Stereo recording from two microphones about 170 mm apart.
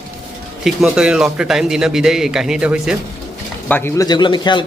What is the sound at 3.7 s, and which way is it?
Speech, 10° left (ahead or behind).